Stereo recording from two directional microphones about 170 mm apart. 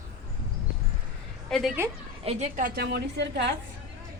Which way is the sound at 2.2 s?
35° right (ahead or behind).